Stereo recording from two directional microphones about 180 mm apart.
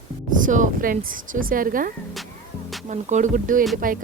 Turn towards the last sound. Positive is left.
turn(degrees=-50)  # may be behind; listen again after turning